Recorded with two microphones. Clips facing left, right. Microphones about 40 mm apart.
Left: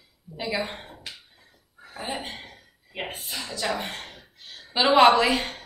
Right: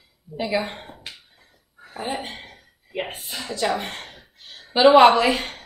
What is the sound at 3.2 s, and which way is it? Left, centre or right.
Speech, centre.